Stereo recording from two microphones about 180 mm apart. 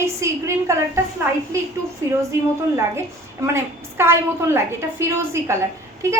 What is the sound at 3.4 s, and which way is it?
A woman's voice, 15° right (ahead or behind).